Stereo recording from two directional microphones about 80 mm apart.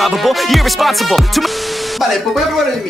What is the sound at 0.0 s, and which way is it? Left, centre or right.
Music, centre.